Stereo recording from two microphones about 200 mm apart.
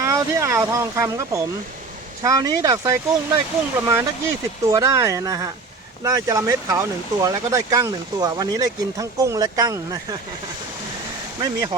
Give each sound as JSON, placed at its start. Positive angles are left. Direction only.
{"t": 0.0, "sound": "speech", "side_deg": -15}
{"t": 11.3, "sound": "speech", "side_deg": -20}